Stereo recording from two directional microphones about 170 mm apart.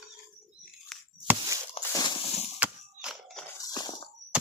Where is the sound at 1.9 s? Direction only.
25° left (ahead or behind).